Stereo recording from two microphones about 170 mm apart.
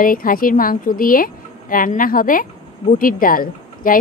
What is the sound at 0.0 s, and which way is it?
Speech, 55° left (ahead or behind).